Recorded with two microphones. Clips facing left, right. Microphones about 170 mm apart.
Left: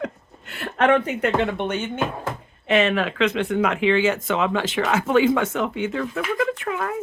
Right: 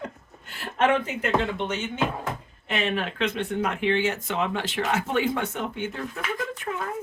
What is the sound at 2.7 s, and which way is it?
Speech, 90° left.